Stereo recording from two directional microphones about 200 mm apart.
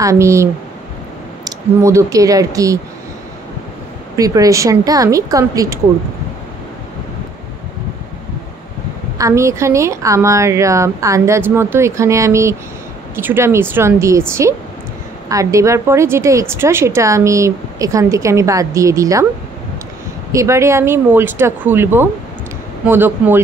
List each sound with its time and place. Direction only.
0.0 s a woman's voice: 15° right (ahead or behind)
4.2 s a woman's voice: 15° right (ahead or behind)
9.2 s a woman's voice: 15° right (ahead or behind)
15.2 s a woman's voice: 15° right (ahead or behind)
20.3 s a woman's voice: 15° right (ahead or behind)